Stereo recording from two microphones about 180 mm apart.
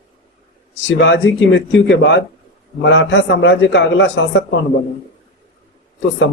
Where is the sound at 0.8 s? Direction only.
90° left.